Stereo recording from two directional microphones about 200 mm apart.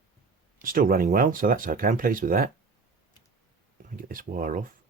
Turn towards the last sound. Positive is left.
turn(degrees=-40)  # may be behind; listen again after turning